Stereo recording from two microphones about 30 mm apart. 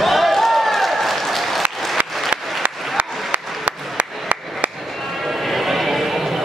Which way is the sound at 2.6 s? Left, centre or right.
Right.